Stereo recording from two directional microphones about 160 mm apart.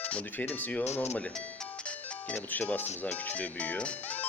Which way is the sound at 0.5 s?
10° left (ahead or behind).